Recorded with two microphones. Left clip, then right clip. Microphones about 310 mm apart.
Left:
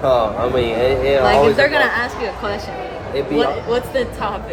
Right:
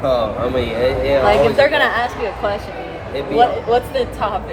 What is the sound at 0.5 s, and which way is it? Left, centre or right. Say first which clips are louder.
Speech: left 1 dB; centre.